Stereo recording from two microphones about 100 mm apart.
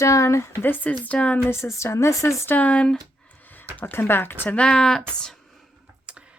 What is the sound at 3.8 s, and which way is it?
Speech, 20° left (ahead or behind).